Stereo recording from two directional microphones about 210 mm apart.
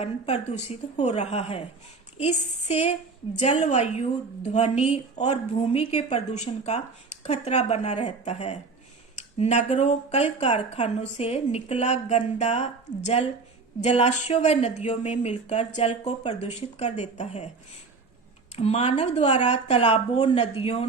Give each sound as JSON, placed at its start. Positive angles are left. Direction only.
{"t": 0.0, "sound": "a woman's voice", "side_deg": 30}
{"t": 2.1, "sound": "a sound", "side_deg": 30}
{"t": 3.3, "sound": "a woman's voice", "side_deg": 35}
{"t": 13.8, "sound": "a woman's voice", "side_deg": 30}
{"t": 18.5, "sound": "a woman's voice", "side_deg": 30}